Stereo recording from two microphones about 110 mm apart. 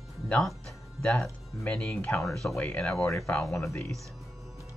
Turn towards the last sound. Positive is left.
turn(degrees=5)  # may be behind; listen again after turning